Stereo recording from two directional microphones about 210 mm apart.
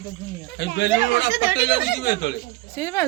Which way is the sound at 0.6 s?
55° left (ahead or behind).